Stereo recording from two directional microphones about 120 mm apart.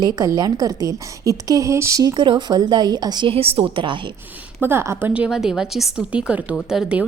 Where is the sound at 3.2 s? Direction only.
55° right (ahead or behind).